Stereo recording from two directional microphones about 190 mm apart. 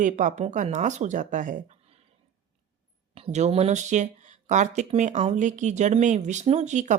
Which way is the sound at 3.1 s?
35° right (ahead or behind).